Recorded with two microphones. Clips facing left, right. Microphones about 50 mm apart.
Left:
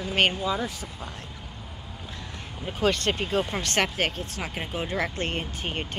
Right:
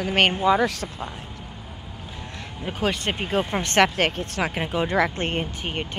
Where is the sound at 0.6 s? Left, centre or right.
Right.